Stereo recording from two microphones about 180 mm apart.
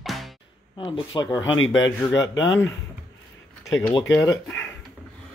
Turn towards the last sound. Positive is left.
turn(degrees=15)  # may be behind; listen again after turning